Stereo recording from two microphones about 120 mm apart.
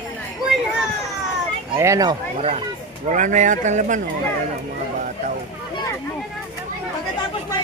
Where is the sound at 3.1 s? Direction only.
90° right.